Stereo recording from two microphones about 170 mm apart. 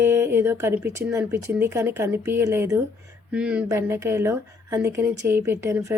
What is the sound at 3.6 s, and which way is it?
Speech, 15° right (ahead or behind).